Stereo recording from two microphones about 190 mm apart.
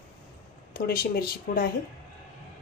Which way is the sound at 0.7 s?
50° left (ahead or behind).